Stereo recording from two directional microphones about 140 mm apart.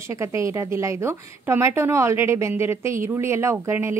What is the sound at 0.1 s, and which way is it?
A woman's voice, 20° right (ahead or behind).